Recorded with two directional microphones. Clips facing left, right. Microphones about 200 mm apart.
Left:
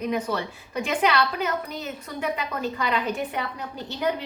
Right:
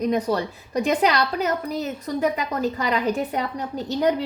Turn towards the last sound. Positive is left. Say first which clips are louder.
# right 6 dB
turn(degrees=-40)  # may be behind; listen again after turning